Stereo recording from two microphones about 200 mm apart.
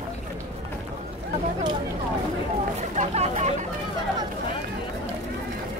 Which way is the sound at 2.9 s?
35° right (ahead or behind).